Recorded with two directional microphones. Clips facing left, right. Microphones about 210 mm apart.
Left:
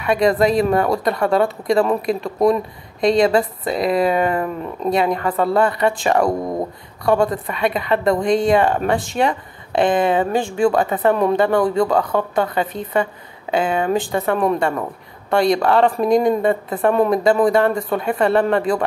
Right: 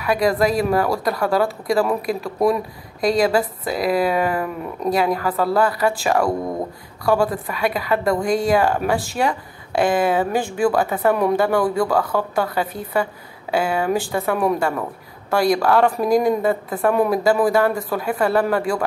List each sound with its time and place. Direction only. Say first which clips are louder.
0.0 s speech: left 2 dB; centre (ahead or behind)
11.8 s speech: left 2 dB; 20° left (ahead or behind)
12.6 s speech: left 2 dB; 5° right (ahead or behind)